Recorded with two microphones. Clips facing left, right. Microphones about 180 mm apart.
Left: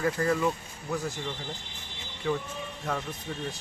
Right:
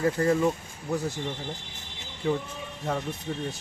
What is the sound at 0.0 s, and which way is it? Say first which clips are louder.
Speech: right 3 dB; 25° right (ahead or behind).